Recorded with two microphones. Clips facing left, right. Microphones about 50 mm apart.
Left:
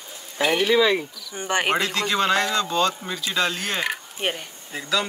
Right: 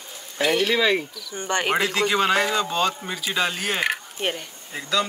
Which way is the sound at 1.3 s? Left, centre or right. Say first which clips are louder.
Left 1 dB; centre.